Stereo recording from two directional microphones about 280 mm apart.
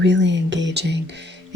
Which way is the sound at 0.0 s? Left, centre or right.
Right.